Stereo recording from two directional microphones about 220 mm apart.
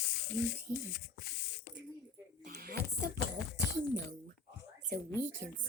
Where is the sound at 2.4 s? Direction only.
45° right (ahead or behind).